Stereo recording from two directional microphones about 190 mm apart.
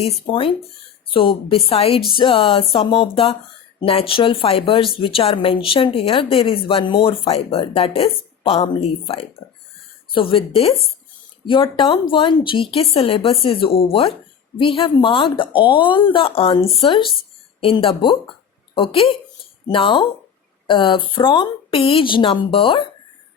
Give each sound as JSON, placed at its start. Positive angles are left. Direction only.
{"t": 0.0, "sound": "a woman's voice", "side_deg": 30}